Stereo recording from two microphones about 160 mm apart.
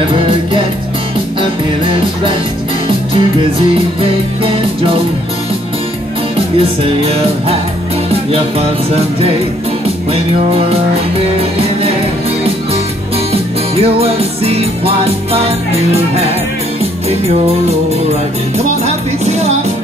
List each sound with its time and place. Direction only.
0.1 s music: 30° right (ahead or behind)
6.3 s music: 35° right (ahead or behind)
13.3 s music: 40° right (ahead or behind)
17.1 s music: 40° right (ahead or behind)
19.2 s music: 40° right (ahead or behind)